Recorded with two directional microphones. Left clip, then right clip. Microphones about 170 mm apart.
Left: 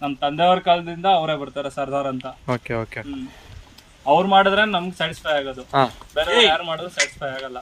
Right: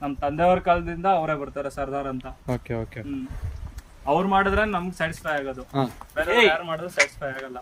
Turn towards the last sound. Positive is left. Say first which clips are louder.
# left 3 dB
turn(degrees=20)  # may be behind; listen again after turning